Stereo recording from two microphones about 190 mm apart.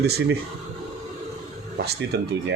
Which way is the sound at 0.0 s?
60° right (ahead or behind).